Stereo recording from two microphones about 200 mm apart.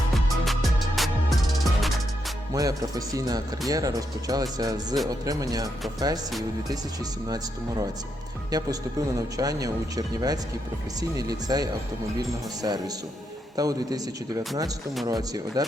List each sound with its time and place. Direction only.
0.1 s music: centre (ahead or behind)
2.5 s speech: 15° right (ahead or behind)